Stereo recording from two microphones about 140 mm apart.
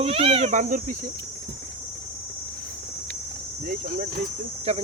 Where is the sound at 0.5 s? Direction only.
65° right (ahead or behind).